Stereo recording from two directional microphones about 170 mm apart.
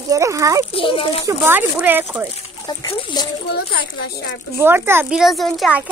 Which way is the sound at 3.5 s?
70° left (ahead or behind).